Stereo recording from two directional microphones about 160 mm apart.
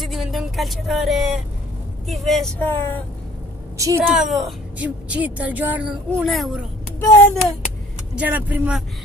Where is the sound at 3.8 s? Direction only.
20° right (ahead or behind).